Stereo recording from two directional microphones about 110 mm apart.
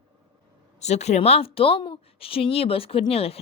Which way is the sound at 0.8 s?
90° left.